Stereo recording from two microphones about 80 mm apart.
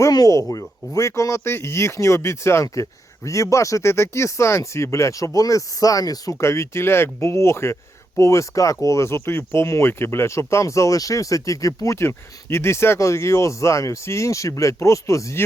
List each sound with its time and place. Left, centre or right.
0.1 s speech: left